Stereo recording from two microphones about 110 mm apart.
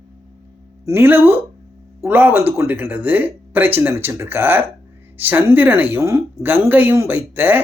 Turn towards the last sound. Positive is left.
turn(degrees=-20)  # may be behind; listen again after turning